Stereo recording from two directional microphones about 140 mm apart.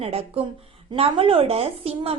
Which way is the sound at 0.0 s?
45° right (ahead or behind).